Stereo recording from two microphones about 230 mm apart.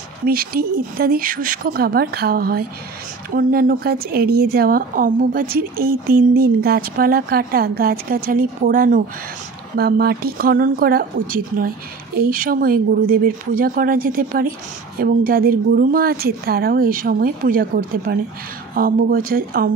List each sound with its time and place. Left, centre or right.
0.2 s a woman's voice: right